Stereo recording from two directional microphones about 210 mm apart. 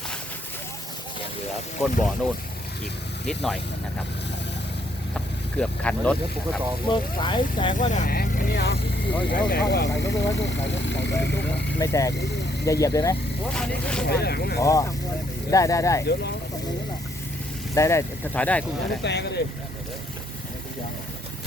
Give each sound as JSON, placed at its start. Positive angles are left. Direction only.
{"t": 1.8, "sound": "speech", "side_deg": 0}
{"t": 5.1, "sound": "speech", "side_deg": 5}
{"t": 6.8, "sound": "speech", "side_deg": 20}
{"t": 7.7, "sound": "speech", "side_deg": 35}
{"t": 11.8, "sound": "speech", "side_deg": 15}
{"t": 13.5, "sound": "speech", "side_deg": 5}
{"t": 14.1, "sound": "speech", "side_deg": 50}
{"t": 14.6, "sound": "speech", "side_deg": 15}
{"t": 17.7, "sound": "speech", "side_deg": 15}
{"t": 19.0, "sound": "speech", "side_deg": 50}